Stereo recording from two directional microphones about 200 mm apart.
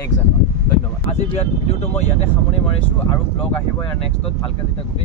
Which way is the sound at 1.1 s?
30° left (ahead or behind).